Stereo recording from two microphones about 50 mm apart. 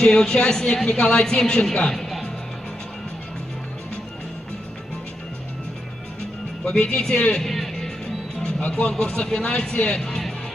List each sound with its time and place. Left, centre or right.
0.0 s a woman's voice: centre
6.6 s a woman's voice: centre
7.4 s music: centre
8.6 s a woman's voice: left